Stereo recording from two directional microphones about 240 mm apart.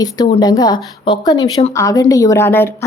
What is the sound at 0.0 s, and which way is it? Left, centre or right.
Speech, centre.